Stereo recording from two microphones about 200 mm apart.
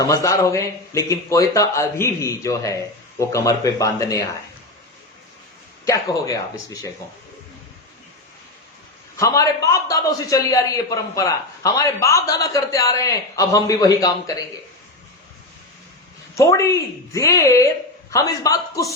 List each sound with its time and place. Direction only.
0.0 s a man's voice: 15° left (ahead or behind)
5.8 s a man's voice: 15° left (ahead or behind)
9.1 s a man's voice: 15° left (ahead or behind)
16.3 s a man's voice: 15° left (ahead or behind)